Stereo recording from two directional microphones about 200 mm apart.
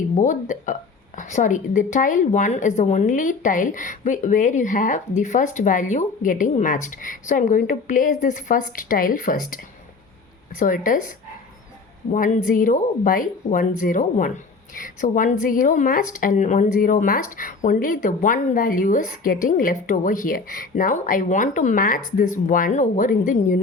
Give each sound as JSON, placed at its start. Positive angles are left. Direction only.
{"t": 0.2, "sound": "speech", "side_deg": 40}
{"t": 10.6, "sound": "speech", "side_deg": 40}
{"t": 12.1, "sound": "speech", "side_deg": 40}